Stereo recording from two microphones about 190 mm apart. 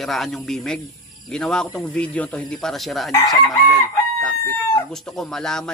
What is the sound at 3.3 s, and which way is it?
Chicken, centre (ahead or behind).